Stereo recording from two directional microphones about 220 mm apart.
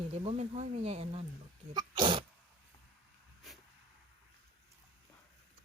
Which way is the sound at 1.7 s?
20° right (ahead or behind).